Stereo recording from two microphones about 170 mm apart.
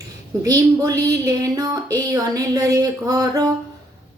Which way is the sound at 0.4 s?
20° right (ahead or behind).